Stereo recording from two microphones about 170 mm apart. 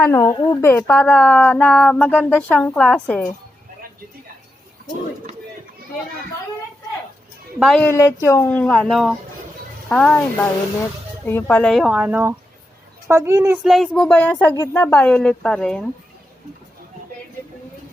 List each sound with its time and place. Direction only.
0.0 s speech: 15° left (ahead or behind)
7.6 s a woman's voice: 5° left (ahead or behind)
7.9 s a woman's voice: 15° left (ahead or behind)
11.3 s a woman's voice: 10° left (ahead or behind); by 13.6 s 15° right (ahead or behind)
13.7 s a woman's voice: centre (ahead or behind)